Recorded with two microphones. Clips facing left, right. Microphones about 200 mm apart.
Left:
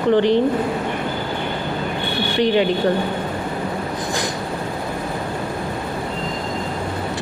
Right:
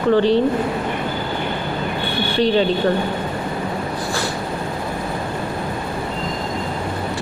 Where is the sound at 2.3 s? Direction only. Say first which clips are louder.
Even; 15° left (ahead or behind).